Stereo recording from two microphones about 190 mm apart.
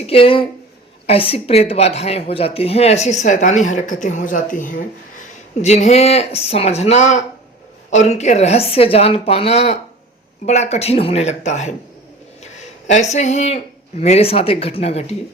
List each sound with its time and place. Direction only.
0.0 s a woman's voice: 30° left (ahead or behind)
12.9 s a woman's voice: 35° left (ahead or behind)